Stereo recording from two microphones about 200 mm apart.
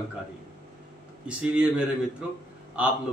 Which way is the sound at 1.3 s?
5° right (ahead or behind).